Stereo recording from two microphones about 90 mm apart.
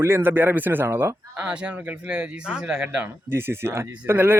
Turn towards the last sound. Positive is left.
turn(degrees=-25)  # may be behind; listen again after turning